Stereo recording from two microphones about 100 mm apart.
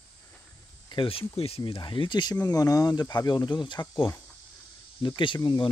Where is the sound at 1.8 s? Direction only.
55° left (ahead or behind).